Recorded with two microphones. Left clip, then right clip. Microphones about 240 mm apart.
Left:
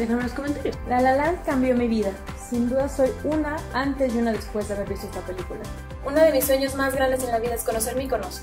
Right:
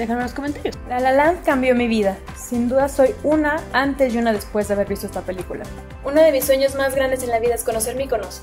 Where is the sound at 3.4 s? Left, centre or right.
Right.